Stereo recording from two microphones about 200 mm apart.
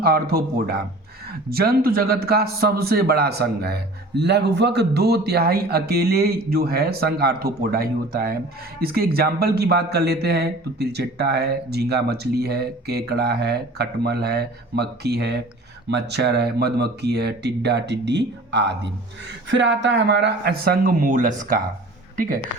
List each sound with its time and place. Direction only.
0.0 s speech: 50° right (ahead or behind)